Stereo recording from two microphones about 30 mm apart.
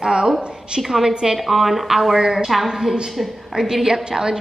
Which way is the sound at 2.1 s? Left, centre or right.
Right.